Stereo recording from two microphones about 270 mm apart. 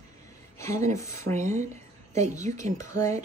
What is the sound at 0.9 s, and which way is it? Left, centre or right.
Speech, centre.